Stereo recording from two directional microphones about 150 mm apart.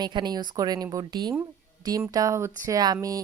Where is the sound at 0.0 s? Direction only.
30° right (ahead or behind).